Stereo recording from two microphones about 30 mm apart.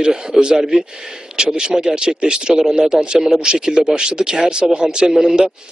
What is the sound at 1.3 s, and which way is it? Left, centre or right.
A man's voice, right.